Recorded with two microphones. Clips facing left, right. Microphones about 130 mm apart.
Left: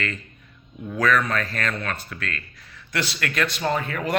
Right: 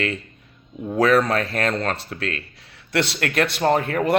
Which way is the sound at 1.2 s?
65° right (ahead or behind).